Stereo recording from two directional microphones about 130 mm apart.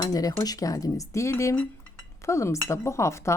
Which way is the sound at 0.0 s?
30° left (ahead or behind).